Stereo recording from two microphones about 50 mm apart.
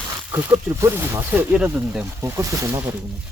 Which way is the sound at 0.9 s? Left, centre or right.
Right.